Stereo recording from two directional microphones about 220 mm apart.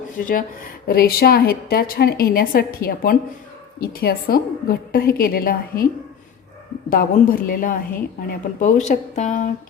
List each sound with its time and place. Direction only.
0.3 s a woman's voice: 40° left (ahead or behind)
6.9 s a woman's voice: 40° left (ahead or behind)